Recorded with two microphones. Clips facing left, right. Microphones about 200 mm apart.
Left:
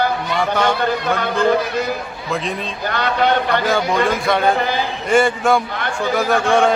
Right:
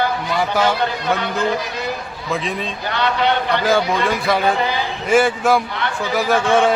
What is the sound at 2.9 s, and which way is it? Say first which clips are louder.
Speech: left 1 dB; 45° left (ahead or behind).